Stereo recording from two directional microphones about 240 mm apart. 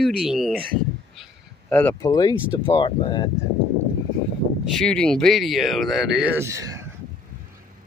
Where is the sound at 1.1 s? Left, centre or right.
Centre.